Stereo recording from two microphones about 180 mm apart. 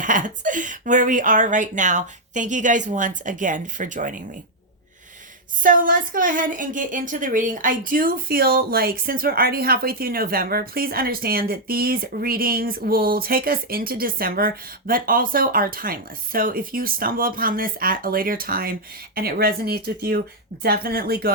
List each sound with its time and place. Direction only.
0.0 s speech: 45° right (ahead or behind)
5.6 s a woman's voice: 50° right (ahead or behind)